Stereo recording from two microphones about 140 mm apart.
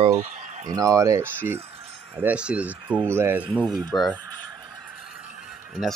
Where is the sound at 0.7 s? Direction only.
25° right (ahead or behind).